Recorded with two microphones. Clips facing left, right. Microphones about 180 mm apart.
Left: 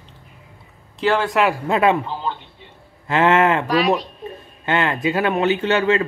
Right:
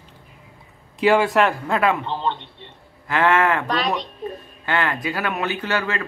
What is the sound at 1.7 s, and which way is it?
Speech, 20° left (ahead or behind).